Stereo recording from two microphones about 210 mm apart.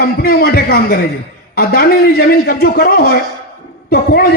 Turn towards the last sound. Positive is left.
turn(degrees=45)  # may be behind; listen again after turning